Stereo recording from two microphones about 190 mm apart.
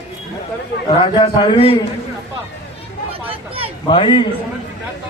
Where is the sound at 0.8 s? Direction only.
25° left (ahead or behind).